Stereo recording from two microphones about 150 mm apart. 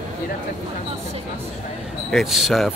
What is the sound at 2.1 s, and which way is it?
Speech, centre (ahead or behind).